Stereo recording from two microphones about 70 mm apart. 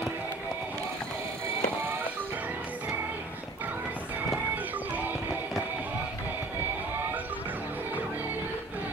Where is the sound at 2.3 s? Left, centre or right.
Right.